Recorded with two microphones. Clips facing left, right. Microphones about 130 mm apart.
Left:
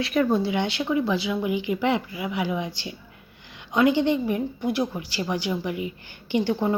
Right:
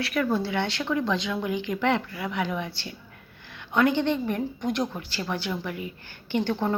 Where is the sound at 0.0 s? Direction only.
20° left (ahead or behind).